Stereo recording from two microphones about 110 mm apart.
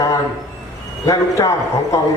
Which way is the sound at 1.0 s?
30° left (ahead or behind).